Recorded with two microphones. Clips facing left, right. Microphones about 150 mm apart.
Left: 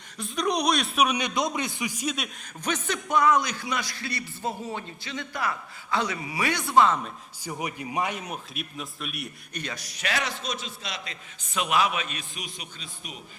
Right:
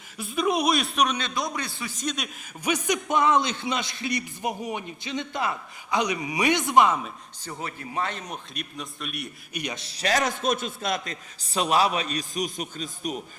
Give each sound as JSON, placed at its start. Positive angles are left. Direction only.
{"t": 0.2, "sound": "a man's voice", "side_deg": -5}
{"t": 2.6, "sound": "a man's voice", "side_deg": -10}
{"t": 7.4, "sound": "a man's voice", "side_deg": 15}
{"t": 9.5, "sound": "a man's voice", "side_deg": -10}
{"t": 9.7, "sound": "a man's voice", "side_deg": -30}